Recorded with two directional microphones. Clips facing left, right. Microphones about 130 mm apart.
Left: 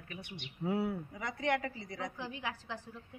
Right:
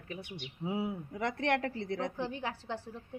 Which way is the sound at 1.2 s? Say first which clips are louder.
Right 4 dB; 65° right (ahead or behind).